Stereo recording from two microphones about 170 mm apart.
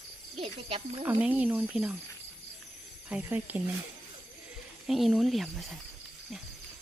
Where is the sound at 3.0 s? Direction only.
10° right (ahead or behind).